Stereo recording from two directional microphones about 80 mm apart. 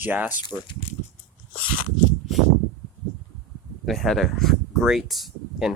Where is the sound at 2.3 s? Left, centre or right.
Centre.